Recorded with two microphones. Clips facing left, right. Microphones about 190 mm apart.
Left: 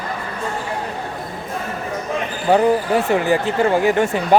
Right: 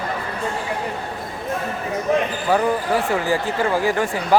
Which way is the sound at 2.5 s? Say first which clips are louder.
Left 5 dB; 25° left (ahead or behind).